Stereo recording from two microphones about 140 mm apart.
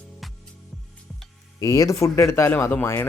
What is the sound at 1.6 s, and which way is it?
Speech, 25° left (ahead or behind).